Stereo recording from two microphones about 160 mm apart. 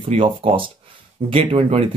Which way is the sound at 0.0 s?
35° right (ahead or behind).